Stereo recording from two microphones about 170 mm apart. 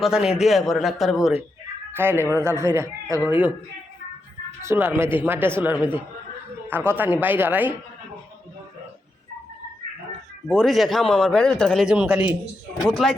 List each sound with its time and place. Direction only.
0.0 s a man's voice: 5° right (ahead or behind)
2.0 s speech: 15° right (ahead or behind)
4.6 s speech: 15° right (ahead or behind)
10.5 s a man's voice: 5° left (ahead or behind)